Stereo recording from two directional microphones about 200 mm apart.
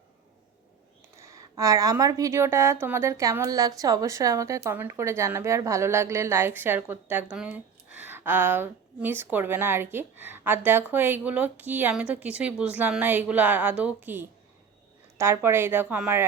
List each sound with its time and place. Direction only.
1.1 s a woman's voice: 15° right (ahead or behind)